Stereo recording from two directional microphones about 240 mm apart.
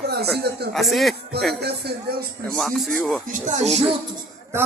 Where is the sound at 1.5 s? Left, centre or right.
Right.